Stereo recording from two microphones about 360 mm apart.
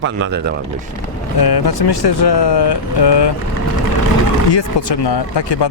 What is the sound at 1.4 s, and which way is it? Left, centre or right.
Speech, left.